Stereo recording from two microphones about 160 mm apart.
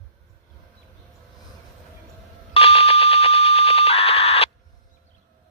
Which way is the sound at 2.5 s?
40° left (ahead or behind).